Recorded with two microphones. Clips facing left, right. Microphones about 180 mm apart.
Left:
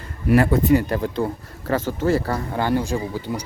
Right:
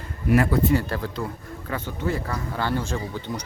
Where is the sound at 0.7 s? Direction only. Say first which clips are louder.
Left 5 dB; 15° left (ahead or behind).